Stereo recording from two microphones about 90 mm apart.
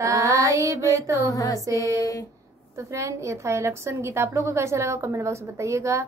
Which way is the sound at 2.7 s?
35° right (ahead or behind).